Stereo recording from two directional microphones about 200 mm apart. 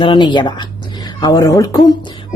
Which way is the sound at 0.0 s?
25° left (ahead or behind).